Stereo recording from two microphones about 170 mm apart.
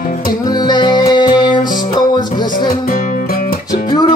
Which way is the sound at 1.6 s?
50° left (ahead or behind).